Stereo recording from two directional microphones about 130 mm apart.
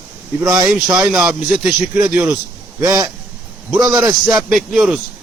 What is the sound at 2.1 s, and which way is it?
Speech, 15° right (ahead or behind).